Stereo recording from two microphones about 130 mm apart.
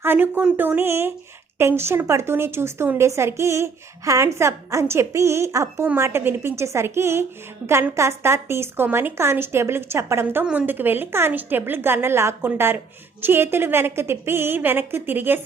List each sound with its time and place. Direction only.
0.0 s a woman's voice: 15° right (ahead or behind)
10.4 s a woman's voice: 10° right (ahead or behind)